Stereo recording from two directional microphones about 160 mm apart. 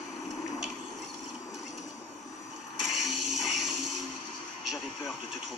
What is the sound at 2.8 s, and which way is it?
Blender, centre (ahead or behind).